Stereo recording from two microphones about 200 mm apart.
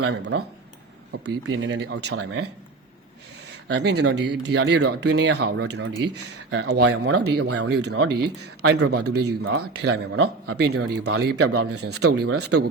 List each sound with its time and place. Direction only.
0.0 s speech: 90° right
1.1 s speech: 65° right (ahead or behind)
3.7 s speech: 55° right (ahead or behind)
5.8 s speech: 70° right (ahead or behind); by 9.5 s 55° right (ahead or behind)
9.5 s speech: 75° right (ahead or behind); by 11.2 s 90° right
11.2 s a man's voice: 55° right (ahead or behind)
11.5 s speech: 90° right